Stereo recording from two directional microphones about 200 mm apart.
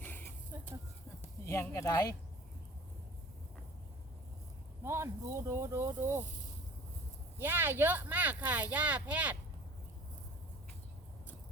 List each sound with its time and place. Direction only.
0.0 s a sound: 10° left (ahead or behind)
1.5 s speech: 15° left (ahead or behind)
4.8 s speech: 15° right (ahead or behind)
7.3 s speech: 10° right (ahead or behind)